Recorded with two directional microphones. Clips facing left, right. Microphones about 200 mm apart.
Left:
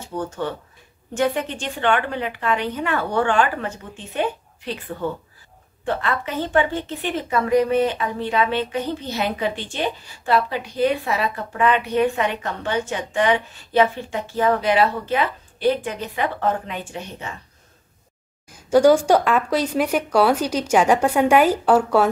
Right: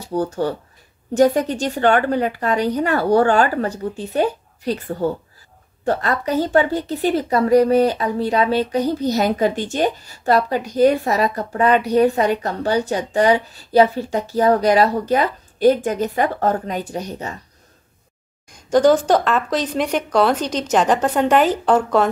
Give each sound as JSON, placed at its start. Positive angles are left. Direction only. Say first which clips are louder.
{"t": 0.0, "sound": "a woman's voice", "louder": "right 6 dB", "side_deg": -35}
{"t": 18.5, "sound": "speech", "louder": "even", "side_deg": 10}